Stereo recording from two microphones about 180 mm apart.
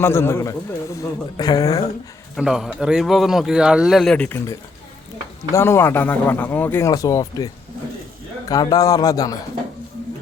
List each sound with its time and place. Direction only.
0.0 s speech: 15° left (ahead or behind)
2.3 s speech: centre (ahead or behind)
5.5 s a man's voice: 15° left (ahead or behind)